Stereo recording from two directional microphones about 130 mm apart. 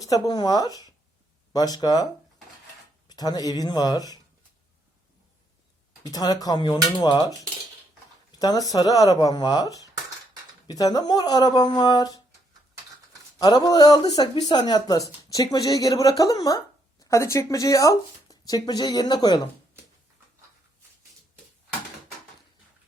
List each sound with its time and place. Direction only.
0.0 s speech: 30° left (ahead or behind)
3.1 s speech: 30° left (ahead or behind)
6.1 s speech: 30° left (ahead or behind)
8.4 s speech: 30° left (ahead or behind)
13.4 s speech: 30° left (ahead or behind)